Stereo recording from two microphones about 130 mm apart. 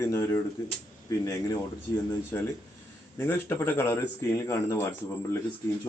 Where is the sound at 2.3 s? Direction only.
15° left (ahead or behind).